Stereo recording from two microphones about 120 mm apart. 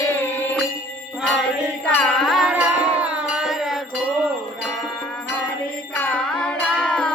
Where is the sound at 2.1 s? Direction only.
Centre (ahead or behind).